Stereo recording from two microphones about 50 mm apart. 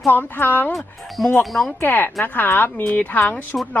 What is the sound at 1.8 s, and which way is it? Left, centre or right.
Speech, left.